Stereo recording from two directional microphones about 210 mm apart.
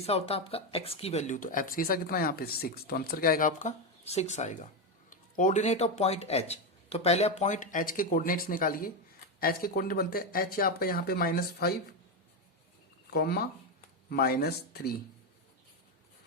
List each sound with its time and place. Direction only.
0.0 s speech: 30° left (ahead or behind); by 11.7 s 45° left (ahead or behind)
13.1 s speech: 50° left (ahead or behind)